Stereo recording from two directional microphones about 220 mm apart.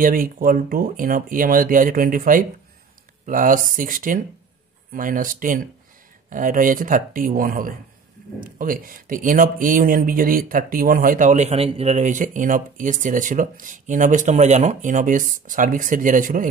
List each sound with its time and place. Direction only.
0.0 s speech: 40° right (ahead or behind)